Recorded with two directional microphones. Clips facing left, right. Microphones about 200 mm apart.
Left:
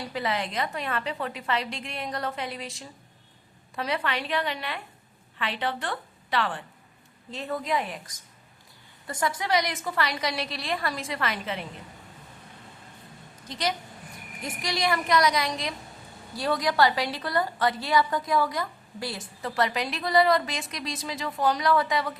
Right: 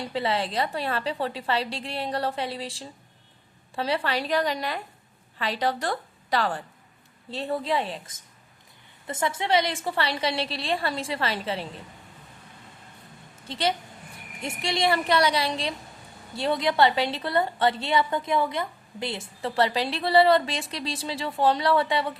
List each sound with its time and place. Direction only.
0.1 s a woman's voice: 30° right (ahead or behind)
13.5 s a woman's voice: 30° right (ahead or behind)